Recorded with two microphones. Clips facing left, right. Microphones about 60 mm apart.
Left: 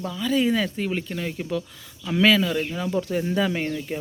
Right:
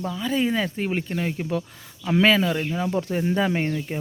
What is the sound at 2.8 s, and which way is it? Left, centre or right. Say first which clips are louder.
Speech: even; right.